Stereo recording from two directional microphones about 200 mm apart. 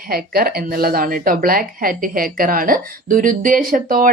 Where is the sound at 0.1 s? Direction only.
50° right (ahead or behind).